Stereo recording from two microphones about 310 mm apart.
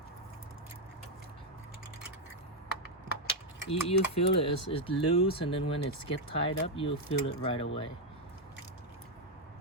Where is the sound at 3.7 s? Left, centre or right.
Centre.